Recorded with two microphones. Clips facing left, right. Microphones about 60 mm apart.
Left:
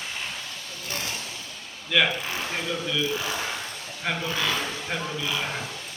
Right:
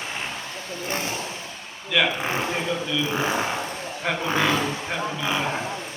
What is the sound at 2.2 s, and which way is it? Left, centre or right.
Speech, right.